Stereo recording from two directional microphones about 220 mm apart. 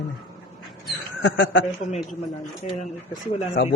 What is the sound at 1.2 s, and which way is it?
Speech, 55° left (ahead or behind).